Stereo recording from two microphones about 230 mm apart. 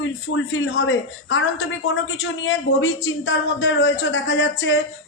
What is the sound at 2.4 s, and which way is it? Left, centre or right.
Speech, left.